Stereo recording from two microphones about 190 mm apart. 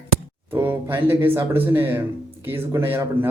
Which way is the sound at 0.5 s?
10° right (ahead or behind).